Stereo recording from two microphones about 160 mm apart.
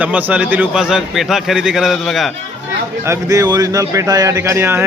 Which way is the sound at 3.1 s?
20° right (ahead or behind).